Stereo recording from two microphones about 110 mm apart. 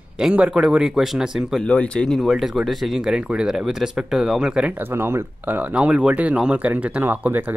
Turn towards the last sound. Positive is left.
turn(degrees=-15)  # may be behind; listen again after turning